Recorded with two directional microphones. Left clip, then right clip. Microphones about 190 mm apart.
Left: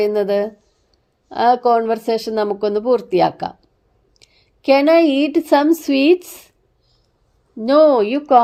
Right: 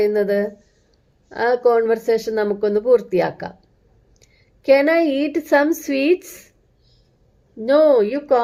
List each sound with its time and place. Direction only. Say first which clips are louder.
0.0 s a woman's voice: left 1 dB; 45° left (ahead or behind)
7.6 s speech: left 2 dB; 45° left (ahead or behind)